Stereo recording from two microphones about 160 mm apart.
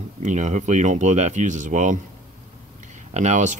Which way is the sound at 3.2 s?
50° right (ahead or behind).